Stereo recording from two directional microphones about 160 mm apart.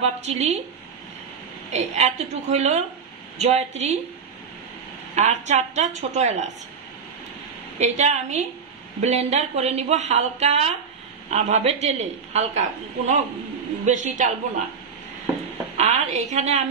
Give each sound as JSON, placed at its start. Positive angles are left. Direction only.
{"t": 0.0, "sound": "a woman's voice", "side_deg": -45}
{"t": 1.7, "sound": "a woman's voice", "side_deg": -45}
{"t": 5.1, "sound": "a woman's voice", "side_deg": -45}
{"t": 7.8, "sound": "a woman's voice", "side_deg": -45}
{"t": 15.8, "sound": "a woman's voice", "side_deg": -45}